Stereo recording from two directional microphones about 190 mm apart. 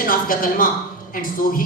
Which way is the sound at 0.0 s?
50° left (ahead or behind).